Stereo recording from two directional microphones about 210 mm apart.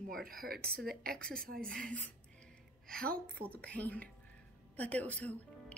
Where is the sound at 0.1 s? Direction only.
45° right (ahead or behind).